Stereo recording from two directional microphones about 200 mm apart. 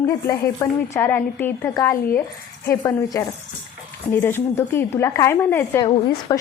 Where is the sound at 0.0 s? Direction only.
15° left (ahead or behind).